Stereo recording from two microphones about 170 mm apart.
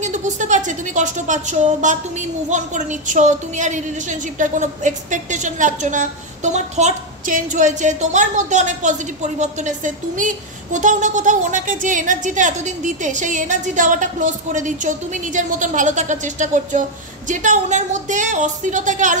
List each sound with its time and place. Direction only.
0.0 s a woman's voice: 45° right (ahead or behind)